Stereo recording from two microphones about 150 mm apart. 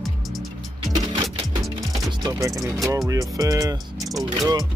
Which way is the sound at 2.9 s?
20° right (ahead or behind).